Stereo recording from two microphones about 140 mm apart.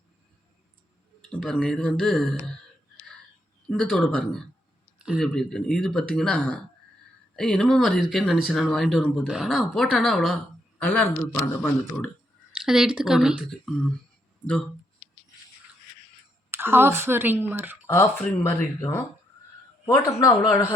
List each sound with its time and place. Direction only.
1.3 s speech: 5° left (ahead or behind)
3.7 s speech: centre (ahead or behind)
4.9 s a sound: 5° right (ahead or behind)
5.2 s speech: 5° left (ahead or behind)
12.5 s speech: 5° right (ahead or behind)
16.5 s speech: 15° right (ahead or behind)
17.8 s speech: 15° left (ahead or behind); by 20.7 s 30° left (ahead or behind)